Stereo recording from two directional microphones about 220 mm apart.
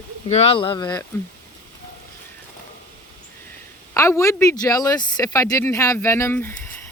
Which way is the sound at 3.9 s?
15° left (ahead or behind).